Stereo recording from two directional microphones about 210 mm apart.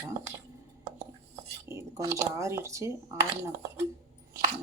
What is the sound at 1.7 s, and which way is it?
Speech, 15° right (ahead or behind).